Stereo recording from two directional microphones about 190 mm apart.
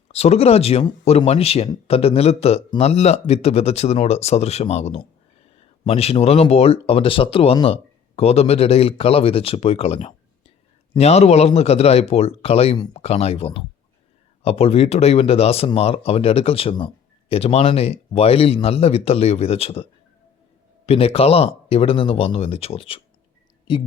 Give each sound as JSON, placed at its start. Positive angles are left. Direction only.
{"t": 0.1, "sound": "speech", "side_deg": 35}